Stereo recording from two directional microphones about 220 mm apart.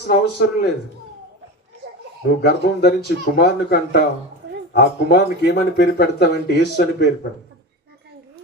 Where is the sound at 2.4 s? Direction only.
45° left (ahead or behind).